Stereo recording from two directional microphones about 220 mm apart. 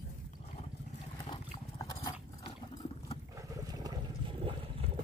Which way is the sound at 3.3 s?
15° right (ahead or behind).